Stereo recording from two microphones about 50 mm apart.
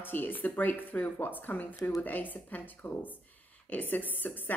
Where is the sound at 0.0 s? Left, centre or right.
Left.